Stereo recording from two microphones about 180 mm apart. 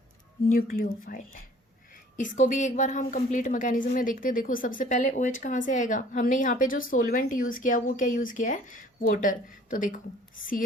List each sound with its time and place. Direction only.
0.5 s a woman's voice: 50° left (ahead or behind)